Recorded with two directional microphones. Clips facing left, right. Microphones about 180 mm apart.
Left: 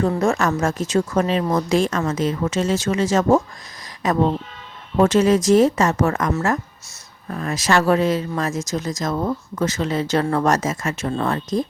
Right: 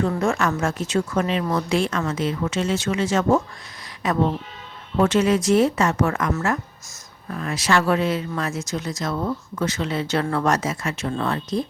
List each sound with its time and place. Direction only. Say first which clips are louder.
0.2 s speech: left 3 dB; 40° left (ahead or behind)